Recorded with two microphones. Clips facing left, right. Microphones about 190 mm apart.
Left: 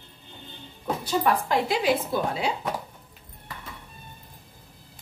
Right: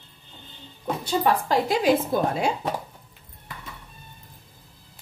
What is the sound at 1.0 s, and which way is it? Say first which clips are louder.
Speech: right 1 dB; 35° right (ahead or behind).